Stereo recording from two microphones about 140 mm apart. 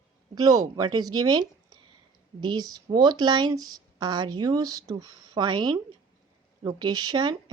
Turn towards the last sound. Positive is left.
turn(degrees=-30)  # may be behind; listen again after turning